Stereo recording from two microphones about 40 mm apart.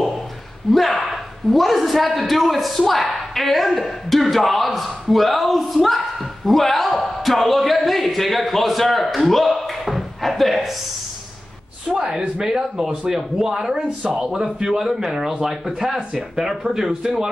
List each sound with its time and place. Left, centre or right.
0.7 s a man's voice: centre
11.9 s speech: centre